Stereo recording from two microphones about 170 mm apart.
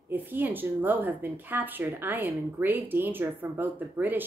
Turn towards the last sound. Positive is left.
turn(degrees=-10)  # may be behind; listen again after turning